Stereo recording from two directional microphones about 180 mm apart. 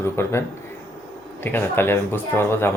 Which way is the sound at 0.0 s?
15° left (ahead or behind).